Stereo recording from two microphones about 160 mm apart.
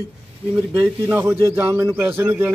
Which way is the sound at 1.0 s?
15° right (ahead or behind).